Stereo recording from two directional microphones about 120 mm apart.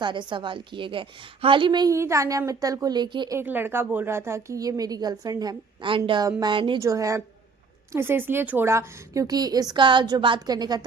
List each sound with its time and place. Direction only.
0.0 s a woman's voice: 40° right (ahead or behind)
1.9 s a woman's voice: 25° right (ahead or behind)
3.3 s a woman's voice: 15° right (ahead or behind); by 6.7 s 45° right (ahead or behind)
6.7 s a woman's voice: 25° right (ahead or behind)